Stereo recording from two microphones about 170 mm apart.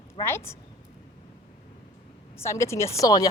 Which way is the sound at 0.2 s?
15° left (ahead or behind).